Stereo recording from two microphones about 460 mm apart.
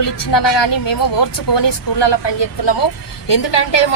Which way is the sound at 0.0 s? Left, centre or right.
Left.